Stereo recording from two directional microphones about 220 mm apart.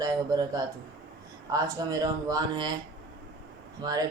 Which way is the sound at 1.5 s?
15° right (ahead or behind).